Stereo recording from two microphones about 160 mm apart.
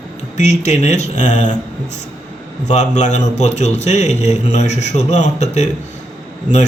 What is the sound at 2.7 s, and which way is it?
A man's voice, 45° left (ahead or behind).